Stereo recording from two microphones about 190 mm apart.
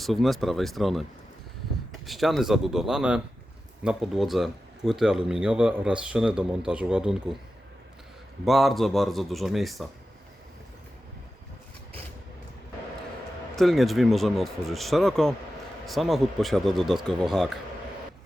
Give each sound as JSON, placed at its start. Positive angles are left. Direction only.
{"t": 0.0, "sound": "a man's voice", "side_deg": 0}
{"t": 8.4, "sound": "a man's voice", "side_deg": 0}
{"t": 13.6, "sound": "a man's voice", "side_deg": 0}